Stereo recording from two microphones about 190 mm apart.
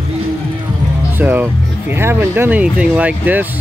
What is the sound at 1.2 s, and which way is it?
Speech, 10° right (ahead or behind).